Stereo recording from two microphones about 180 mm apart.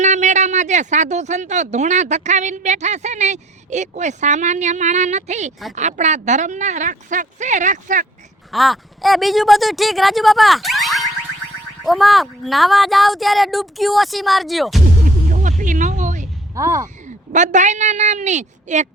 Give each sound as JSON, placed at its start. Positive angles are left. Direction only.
{"t": 0.0, "sound": "speech", "side_deg": -40}
{"t": 8.5, "sound": "speech", "side_deg": 0}
{"t": 15.0, "sound": "music", "side_deg": -45}
{"t": 16.6, "sound": "speech", "side_deg": -15}
{"t": 17.3, "sound": "speech", "side_deg": -40}